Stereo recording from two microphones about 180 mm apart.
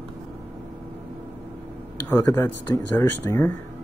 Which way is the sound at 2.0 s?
10° left (ahead or behind).